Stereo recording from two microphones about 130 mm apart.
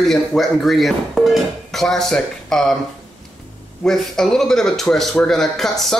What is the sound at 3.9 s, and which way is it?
Speech, 5° left (ahead or behind).